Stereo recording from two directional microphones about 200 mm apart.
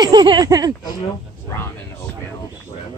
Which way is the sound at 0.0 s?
20° right (ahead or behind).